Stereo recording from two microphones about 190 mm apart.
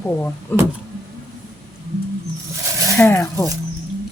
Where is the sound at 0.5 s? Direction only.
10° left (ahead or behind).